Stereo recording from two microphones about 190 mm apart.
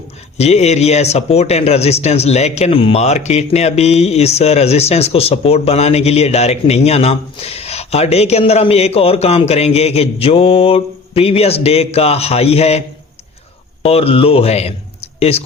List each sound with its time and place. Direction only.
0.3 s speech: 35° left (ahead or behind)
13.8 s speech: 30° left (ahead or behind)